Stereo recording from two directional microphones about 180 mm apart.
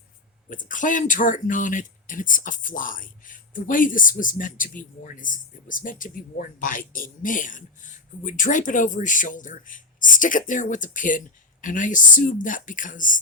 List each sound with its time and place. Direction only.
0.5 s speech: 45° left (ahead or behind)